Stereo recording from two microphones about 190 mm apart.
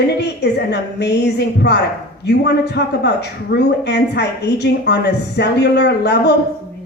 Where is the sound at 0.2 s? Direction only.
60° left (ahead or behind).